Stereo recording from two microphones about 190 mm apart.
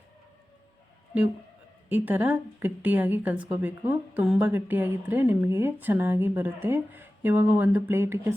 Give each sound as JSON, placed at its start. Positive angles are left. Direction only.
{"t": 1.9, "sound": "a woman's voice", "side_deg": -10}